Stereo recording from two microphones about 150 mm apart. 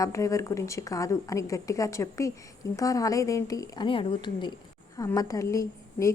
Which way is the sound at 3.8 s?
35° left (ahead or behind).